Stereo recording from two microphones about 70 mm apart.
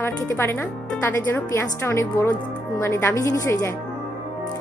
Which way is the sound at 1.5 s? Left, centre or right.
Left.